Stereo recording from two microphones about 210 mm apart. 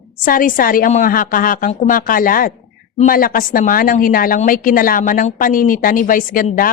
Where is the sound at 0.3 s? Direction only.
40° left (ahead or behind).